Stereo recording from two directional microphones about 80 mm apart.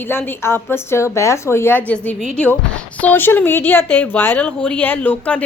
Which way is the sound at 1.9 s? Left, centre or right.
Centre.